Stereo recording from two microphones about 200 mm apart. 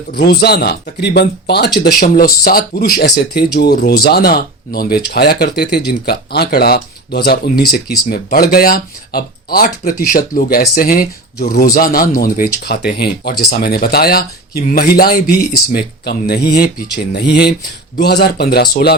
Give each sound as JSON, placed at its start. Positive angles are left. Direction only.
{"t": 0.1, "sound": "speech", "side_deg": 55}